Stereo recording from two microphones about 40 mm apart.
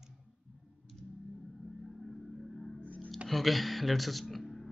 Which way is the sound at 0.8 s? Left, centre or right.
Centre.